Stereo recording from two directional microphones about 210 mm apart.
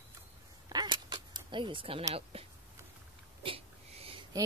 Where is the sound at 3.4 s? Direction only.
25° right (ahead or behind).